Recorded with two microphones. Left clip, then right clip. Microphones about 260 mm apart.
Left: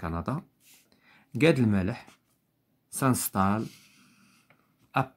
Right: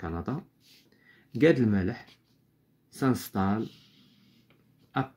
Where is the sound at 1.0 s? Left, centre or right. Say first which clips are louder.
Right 1 dB; left.